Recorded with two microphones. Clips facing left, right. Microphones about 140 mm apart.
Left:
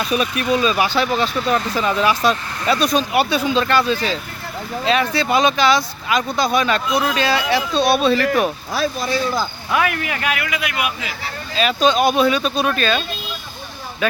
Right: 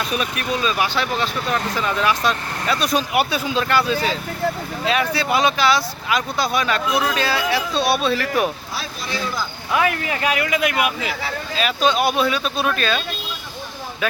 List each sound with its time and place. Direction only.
0.6 s speech: 5° left (ahead or behind)
8.7 s speech: 40° left (ahead or behind)
9.7 s a man's voice: 30° right (ahead or behind)
10.6 s speech: 45° right (ahead or behind)
11.5 s speech: 5° right (ahead or behind)
14.0 s speech: 5° right (ahead or behind)